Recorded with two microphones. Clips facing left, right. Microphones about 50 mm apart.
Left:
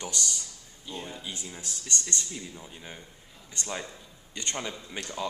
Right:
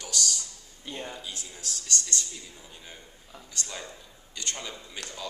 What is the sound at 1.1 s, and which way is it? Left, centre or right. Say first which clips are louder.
Speech: left 1 dB; left.